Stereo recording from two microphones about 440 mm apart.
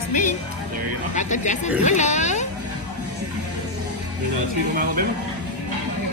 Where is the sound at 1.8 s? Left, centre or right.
Centre.